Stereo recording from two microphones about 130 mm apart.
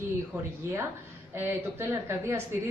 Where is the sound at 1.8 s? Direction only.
20° right (ahead or behind).